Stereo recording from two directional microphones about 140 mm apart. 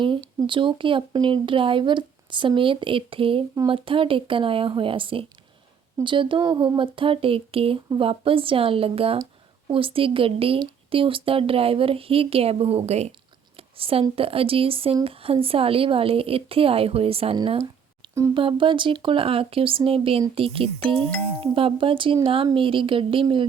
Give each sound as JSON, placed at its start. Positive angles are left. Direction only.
{"t": 0.4, "sound": "speech", "side_deg": -35}
{"t": 17.3, "sound": "speech", "side_deg": -35}
{"t": 18.0, "sound": "a sound", "side_deg": -35}
{"t": 18.3, "sound": "speech", "side_deg": -35}